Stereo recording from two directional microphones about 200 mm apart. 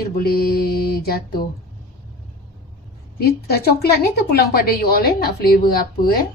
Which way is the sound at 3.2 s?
50° left (ahead or behind).